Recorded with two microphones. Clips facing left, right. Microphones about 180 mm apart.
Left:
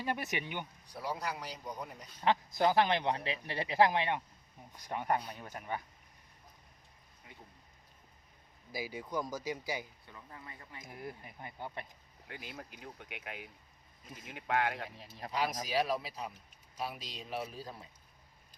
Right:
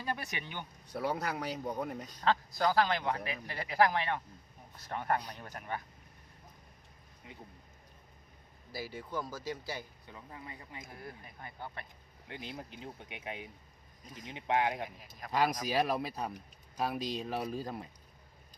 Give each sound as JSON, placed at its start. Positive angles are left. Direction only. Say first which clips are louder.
{"t": 0.0, "sound": "speech", "louder": "left 2 dB", "side_deg": 20}
{"t": 0.9, "sound": "speech", "louder": "right 4 dB", "side_deg": -60}
{"t": 2.2, "sound": "speech", "louder": "left 1 dB", "side_deg": 20}
{"t": 8.7, "sound": "speech", "louder": "left 1 dB", "side_deg": 10}
{"t": 10.1, "sound": "speech", "louder": "right 3 dB", "side_deg": -20}
{"t": 10.8, "sound": "speech", "louder": "left 2 dB", "side_deg": 20}
{"t": 12.3, "sound": "speech", "louder": "right 3 dB", "side_deg": -25}
{"t": 14.8, "sound": "speech", "louder": "left 3 dB", "side_deg": 30}
{"t": 15.3, "sound": "speech", "louder": "right 4 dB", "side_deg": -70}